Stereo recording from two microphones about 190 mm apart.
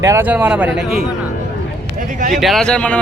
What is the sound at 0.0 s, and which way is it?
Speech, 10° right (ahead or behind).